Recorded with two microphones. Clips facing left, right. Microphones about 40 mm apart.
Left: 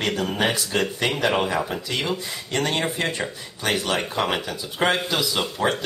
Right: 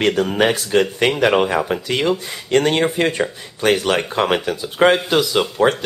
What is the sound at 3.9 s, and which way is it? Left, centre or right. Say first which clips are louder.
Speech: right 6 dB; right.